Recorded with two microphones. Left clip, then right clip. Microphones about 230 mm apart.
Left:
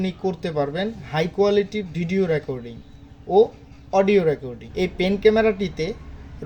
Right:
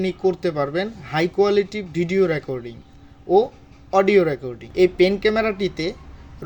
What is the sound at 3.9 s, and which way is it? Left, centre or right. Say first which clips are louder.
A man's voice: right 1 dB; right.